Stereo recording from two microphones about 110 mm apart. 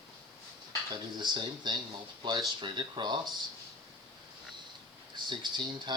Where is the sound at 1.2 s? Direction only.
40° right (ahead or behind).